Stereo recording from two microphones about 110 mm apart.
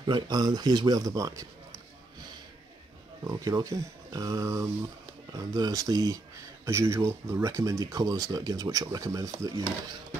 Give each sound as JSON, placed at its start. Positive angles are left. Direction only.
{"t": 0.0, "sound": "speech", "side_deg": -40}
{"t": 3.3, "sound": "speech", "side_deg": -30}